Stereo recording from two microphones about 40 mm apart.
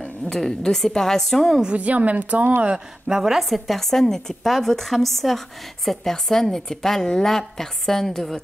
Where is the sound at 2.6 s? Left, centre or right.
Centre.